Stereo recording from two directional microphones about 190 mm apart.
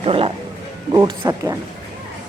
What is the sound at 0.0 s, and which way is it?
A man's voice, 30° right (ahead or behind).